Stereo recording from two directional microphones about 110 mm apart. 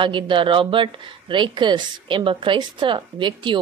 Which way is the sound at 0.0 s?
50° right (ahead or behind).